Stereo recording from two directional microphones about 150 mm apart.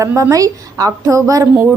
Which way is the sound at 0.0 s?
20° right (ahead or behind).